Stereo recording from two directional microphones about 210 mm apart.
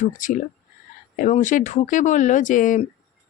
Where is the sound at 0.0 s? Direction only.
35° left (ahead or behind).